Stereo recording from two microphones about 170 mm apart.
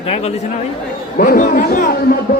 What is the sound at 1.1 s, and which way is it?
Speech, 60° left (ahead or behind).